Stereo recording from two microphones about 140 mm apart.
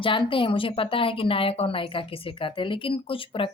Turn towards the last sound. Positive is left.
turn(degrees=40)  # may be behind; listen again after turning